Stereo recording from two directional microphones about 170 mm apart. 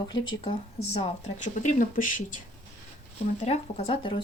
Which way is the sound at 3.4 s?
40° left (ahead or behind).